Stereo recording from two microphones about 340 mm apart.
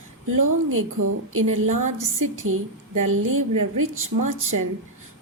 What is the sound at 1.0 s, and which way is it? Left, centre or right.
A woman's voice, right.